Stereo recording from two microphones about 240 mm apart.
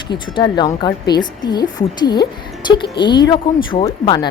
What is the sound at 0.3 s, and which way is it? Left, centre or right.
A woman's voice, centre.